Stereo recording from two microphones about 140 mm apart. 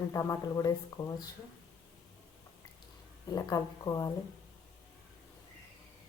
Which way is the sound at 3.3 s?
25° left (ahead or behind).